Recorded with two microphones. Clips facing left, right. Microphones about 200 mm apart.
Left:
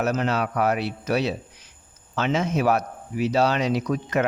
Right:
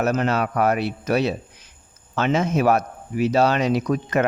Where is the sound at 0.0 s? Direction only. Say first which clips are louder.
Right 3 dB; 50° right (ahead or behind).